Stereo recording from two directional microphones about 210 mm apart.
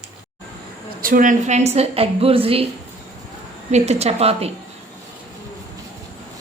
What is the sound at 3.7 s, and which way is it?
Speech, 30° right (ahead or behind).